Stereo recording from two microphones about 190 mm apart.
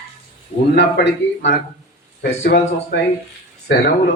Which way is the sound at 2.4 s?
50° left (ahead or behind).